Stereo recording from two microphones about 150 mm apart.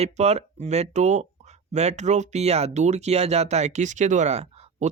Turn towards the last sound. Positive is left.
turn(degrees=-50)  # may be behind; listen again after turning